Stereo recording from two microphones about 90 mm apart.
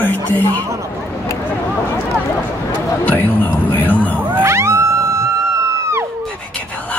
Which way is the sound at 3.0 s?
20° left (ahead or behind).